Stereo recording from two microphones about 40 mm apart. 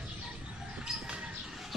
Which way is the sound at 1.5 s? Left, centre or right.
Centre.